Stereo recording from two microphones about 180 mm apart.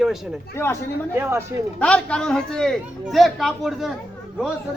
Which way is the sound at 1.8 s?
5° left (ahead or behind).